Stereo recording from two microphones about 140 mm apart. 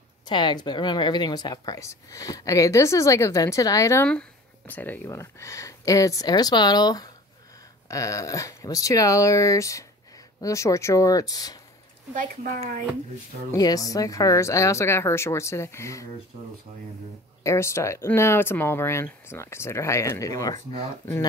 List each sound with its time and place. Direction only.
0.3 s a woman's voice: 30° left (ahead or behind)
4.1 s a woman's voice: 10° left (ahead or behind); by 11.6 s 25° left (ahead or behind)
12.1 s speech: 70° right (ahead or behind)
13.6 s a woman's voice: 25° left (ahead or behind)
17.4 s a woman's voice: 20° left (ahead or behind)